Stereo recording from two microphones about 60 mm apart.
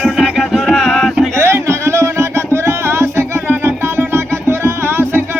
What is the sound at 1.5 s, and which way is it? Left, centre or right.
Music, right.